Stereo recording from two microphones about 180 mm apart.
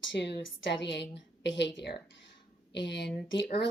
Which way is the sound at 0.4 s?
85° left.